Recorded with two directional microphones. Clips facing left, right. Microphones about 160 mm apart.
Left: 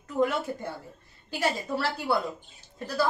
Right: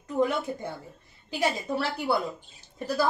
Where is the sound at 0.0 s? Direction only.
15° right (ahead or behind).